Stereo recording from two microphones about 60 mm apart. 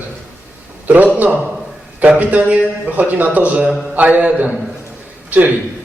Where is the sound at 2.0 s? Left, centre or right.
Right.